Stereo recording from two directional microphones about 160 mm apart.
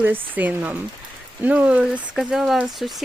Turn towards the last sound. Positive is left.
turn(degrees=0)  # may be behind; listen again after turning